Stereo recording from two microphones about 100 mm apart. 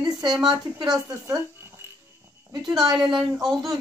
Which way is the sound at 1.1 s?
30° right (ahead or behind).